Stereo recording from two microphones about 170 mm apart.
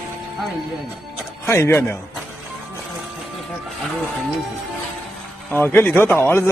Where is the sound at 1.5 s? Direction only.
15° left (ahead or behind).